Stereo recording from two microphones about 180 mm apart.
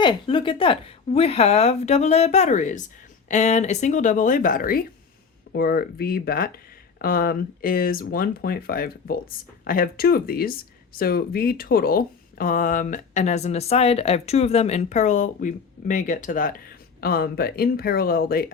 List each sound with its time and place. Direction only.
0.0 s a woman's voice: 25° left (ahead or behind); by 18.5 s 55° left (ahead or behind)